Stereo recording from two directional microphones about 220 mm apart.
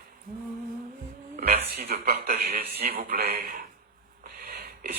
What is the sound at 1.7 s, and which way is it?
Speech, 45° right (ahead or behind).